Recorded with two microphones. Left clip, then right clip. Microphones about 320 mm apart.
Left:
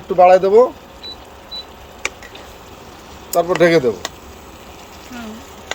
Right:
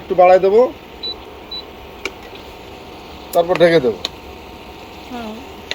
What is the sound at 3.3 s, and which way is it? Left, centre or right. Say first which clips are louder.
Speech: right 1 dB; left.